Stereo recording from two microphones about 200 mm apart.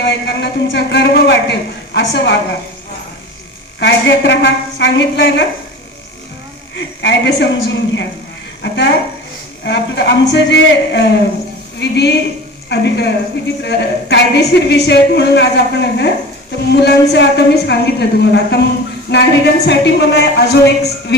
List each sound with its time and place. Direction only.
0.0 s a woman's voice: 60° left (ahead or behind)
3.8 s a woman's voice: 60° left (ahead or behind)
6.7 s a woman's voice: 60° left (ahead or behind)